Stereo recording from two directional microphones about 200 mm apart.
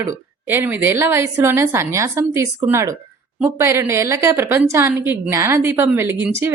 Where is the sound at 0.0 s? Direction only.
10° right (ahead or behind).